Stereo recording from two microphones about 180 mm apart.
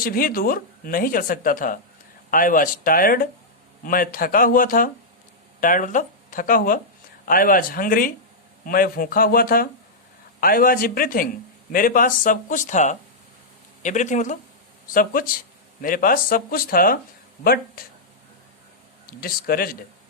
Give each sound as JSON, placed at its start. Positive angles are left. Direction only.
{"t": 0.0, "sound": "speech", "side_deg": 55}
{"t": 19.0, "sound": "speech", "side_deg": 55}